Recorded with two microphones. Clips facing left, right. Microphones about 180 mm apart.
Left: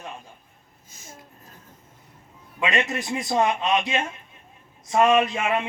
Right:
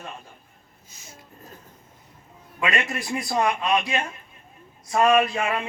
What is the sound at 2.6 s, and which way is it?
A man's voice, 20° left (ahead or behind).